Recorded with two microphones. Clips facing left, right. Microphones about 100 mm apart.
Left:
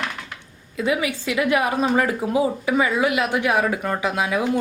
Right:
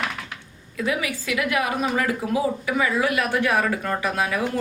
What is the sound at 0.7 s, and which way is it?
A woman's voice, 25° left (ahead or behind).